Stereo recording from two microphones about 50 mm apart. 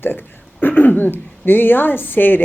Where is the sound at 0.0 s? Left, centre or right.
Left.